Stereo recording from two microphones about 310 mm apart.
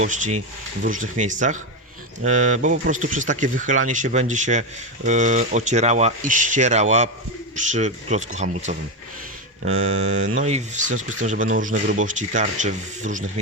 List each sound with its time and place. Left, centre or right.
0.0 s speech: right